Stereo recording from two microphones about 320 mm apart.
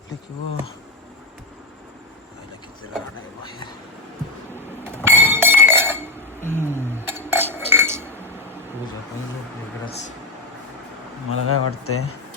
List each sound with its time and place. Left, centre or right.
5.0 s chink: centre
11.3 s speech: left